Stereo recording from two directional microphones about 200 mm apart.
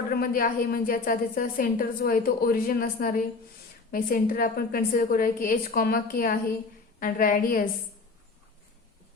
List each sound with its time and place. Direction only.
0.1 s a woman's voice: 45° left (ahead or behind)